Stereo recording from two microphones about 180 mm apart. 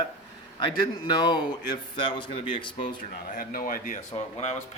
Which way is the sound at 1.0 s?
25° left (ahead or behind).